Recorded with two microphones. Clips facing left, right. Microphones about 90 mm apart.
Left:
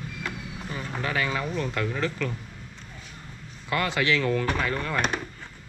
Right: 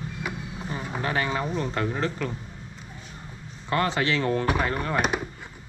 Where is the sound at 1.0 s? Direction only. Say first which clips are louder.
Right 1 dB; 25° right (ahead or behind).